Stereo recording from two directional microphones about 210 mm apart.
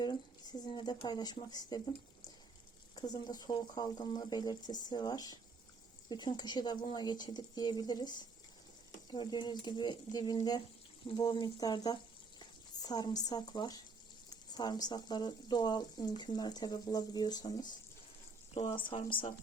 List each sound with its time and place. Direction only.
0.0 s speech: 20° left (ahead or behind)
2.9 s speech: 20° left (ahead or behind)